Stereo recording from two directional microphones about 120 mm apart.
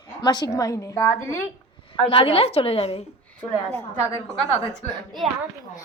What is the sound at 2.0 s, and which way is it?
A woman's voice, 50° left (ahead or behind).